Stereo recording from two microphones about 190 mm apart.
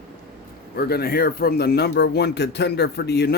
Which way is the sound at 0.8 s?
55° left (ahead or behind).